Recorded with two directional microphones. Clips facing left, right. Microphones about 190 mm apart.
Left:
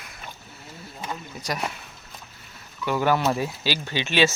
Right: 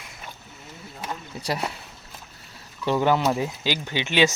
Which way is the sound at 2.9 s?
20° right (ahead or behind).